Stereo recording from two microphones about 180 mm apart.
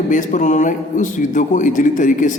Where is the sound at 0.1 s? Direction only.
45° left (ahead or behind).